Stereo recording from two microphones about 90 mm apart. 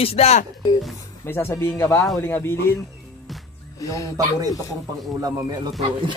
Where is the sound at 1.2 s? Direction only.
30° left (ahead or behind).